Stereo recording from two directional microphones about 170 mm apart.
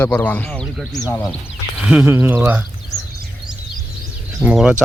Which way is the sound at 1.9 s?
10° right (ahead or behind).